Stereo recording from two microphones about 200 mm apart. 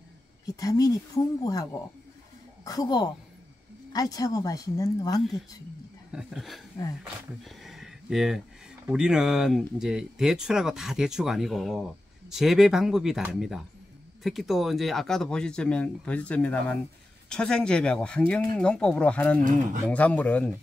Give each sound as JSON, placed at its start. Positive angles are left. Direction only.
{"t": 0.5, "sound": "a woman's voice", "side_deg": 15}
{"t": 6.1, "sound": "speech", "side_deg": 0}